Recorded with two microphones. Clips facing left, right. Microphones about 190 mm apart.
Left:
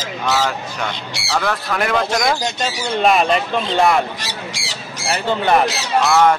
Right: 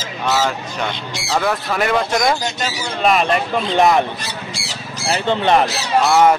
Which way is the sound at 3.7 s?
20° right (ahead or behind).